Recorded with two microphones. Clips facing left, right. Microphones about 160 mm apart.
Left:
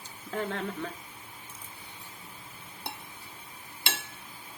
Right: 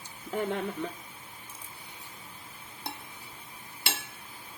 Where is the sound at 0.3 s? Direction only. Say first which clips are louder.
Right 2 dB; 15° right (ahead or behind).